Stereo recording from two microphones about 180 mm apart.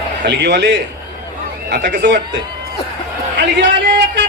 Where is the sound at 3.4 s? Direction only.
75° right (ahead or behind).